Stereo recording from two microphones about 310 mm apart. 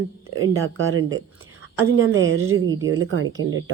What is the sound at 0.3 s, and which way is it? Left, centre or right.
Speech, right.